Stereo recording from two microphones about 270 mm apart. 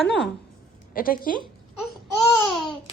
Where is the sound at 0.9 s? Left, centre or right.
Left.